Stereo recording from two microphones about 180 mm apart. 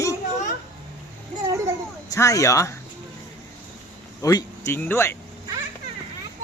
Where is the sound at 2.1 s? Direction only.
20° left (ahead or behind).